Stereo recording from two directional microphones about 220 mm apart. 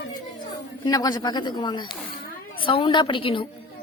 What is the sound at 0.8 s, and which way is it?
Speech, 15° left (ahead or behind).